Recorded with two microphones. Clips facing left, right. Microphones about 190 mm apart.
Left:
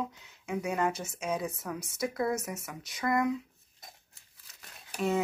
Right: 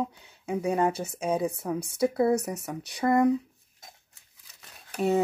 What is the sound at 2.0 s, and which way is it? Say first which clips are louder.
Speech: right 7 dB; 30° right (ahead or behind).